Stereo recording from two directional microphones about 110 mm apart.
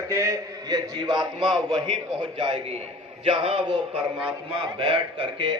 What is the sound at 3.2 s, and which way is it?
A man's voice, 55° right (ahead or behind).